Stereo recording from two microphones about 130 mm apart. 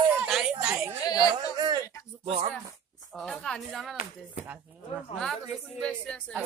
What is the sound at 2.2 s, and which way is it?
Speech, 45° right (ahead or behind).